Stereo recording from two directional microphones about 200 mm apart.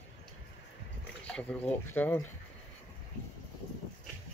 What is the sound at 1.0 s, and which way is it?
Speech, 5° left (ahead or behind).